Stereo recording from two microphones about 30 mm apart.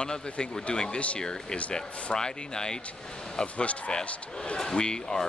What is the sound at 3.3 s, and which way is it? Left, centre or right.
Speech, left.